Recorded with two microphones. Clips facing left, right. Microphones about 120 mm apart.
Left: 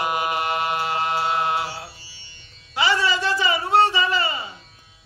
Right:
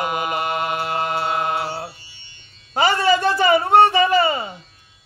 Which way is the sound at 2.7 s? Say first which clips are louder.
Right 5 dB; 50° right (ahead or behind).